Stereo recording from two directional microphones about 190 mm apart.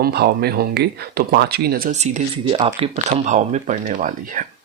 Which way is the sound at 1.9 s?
35° right (ahead or behind).